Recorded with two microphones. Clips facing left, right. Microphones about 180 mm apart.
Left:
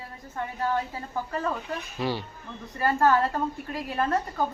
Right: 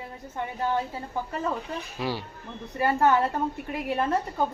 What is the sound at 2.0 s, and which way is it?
Speech, 10° right (ahead or behind).